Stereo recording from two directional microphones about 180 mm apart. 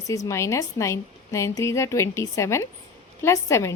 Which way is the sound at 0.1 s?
15° left (ahead or behind).